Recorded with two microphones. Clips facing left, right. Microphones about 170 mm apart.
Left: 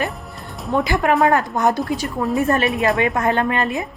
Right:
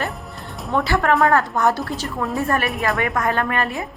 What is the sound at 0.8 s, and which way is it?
A woman's voice, 15° left (ahead or behind).